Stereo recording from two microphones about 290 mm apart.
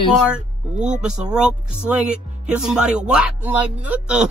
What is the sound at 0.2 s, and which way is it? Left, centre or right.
Speech, centre.